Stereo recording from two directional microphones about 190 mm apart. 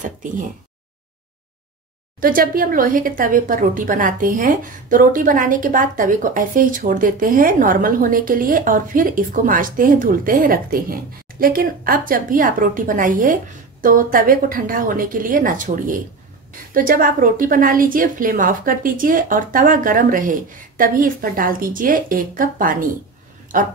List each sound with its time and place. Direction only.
2.1 s speech: 50° right (ahead or behind)